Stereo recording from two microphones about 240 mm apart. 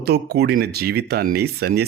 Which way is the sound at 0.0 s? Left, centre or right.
Right.